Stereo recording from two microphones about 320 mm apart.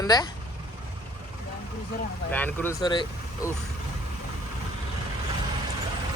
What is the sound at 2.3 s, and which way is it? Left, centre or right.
Speech, centre.